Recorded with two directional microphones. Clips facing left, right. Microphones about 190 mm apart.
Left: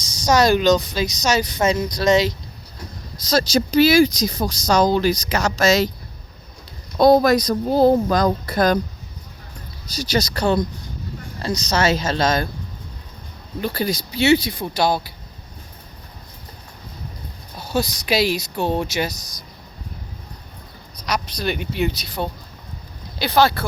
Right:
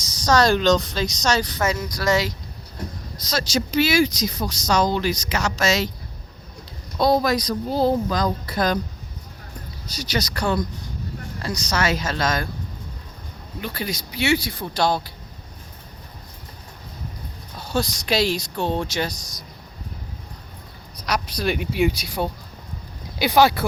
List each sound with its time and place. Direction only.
0.3 s speech: 10° left (ahead or behind)
1.5 s speech: 20° left (ahead or behind)
3.2 s speech: 35° left (ahead or behind)
7.0 s speech: 50° left (ahead or behind)
10.0 s speech: 30° left (ahead or behind)
13.6 s speech: 35° left (ahead or behind); by 15.1 s 5° left (ahead or behind)
17.6 s speech: 5° left (ahead or behind)
21.1 s speech: 5° right (ahead or behind)